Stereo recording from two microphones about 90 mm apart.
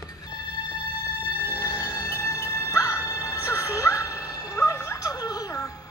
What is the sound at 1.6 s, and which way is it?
Music, 45° left (ahead or behind).